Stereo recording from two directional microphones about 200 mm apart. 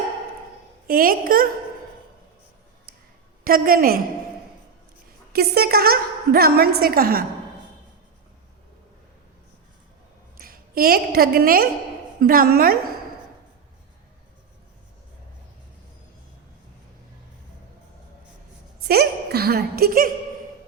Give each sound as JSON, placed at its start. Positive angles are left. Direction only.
{"t": 0.9, "sound": "a woman's voice", "side_deg": -45}
{"t": 3.4, "sound": "a woman's voice", "side_deg": -45}
{"t": 5.3, "sound": "a woman's voice", "side_deg": -50}
{"t": 10.3, "sound": "a woman's voice", "side_deg": -45}
{"t": 18.9, "sound": "a sound", "side_deg": -50}